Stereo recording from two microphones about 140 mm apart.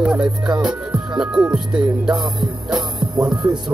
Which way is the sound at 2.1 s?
30° right (ahead or behind).